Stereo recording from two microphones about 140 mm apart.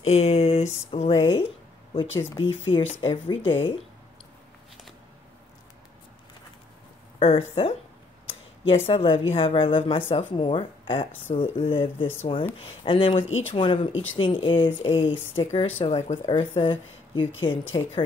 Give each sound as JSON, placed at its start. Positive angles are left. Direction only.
{"t": 0.0, "sound": "speech", "side_deg": 50}
{"t": 2.5, "sound": "speech", "side_deg": 45}
{"t": 7.2, "sound": "speech", "side_deg": 45}